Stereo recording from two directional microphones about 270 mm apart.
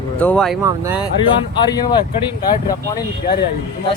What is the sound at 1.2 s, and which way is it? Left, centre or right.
Speech, centre.